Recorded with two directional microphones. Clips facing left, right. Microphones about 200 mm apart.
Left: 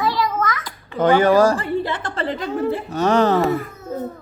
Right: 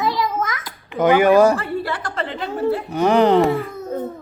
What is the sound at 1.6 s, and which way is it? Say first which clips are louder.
Speech: left 2 dB; 20° left (ahead or behind).